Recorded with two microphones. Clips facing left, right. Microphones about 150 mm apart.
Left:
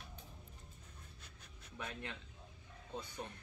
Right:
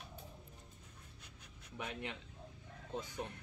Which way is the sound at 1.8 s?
15° right (ahead or behind).